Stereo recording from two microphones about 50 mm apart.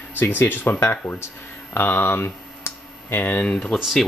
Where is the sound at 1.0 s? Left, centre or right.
Left.